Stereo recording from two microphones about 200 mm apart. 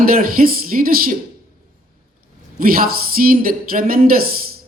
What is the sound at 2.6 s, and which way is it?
Speech, 45° right (ahead or behind).